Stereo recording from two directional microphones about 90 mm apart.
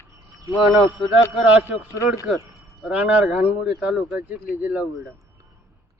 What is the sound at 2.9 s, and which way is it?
Speech, 15° right (ahead or behind).